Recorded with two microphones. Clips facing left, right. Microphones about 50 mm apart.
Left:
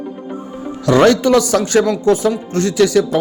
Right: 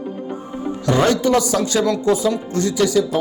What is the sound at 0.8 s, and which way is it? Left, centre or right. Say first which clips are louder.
Speech: left 6 dB; left.